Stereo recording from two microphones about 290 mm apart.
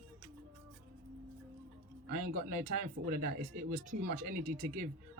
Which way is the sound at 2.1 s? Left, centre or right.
Right.